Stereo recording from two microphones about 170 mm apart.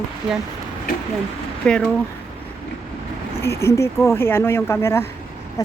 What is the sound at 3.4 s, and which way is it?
Speech, 15° left (ahead or behind).